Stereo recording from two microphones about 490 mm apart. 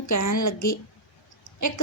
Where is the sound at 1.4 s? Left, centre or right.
Left.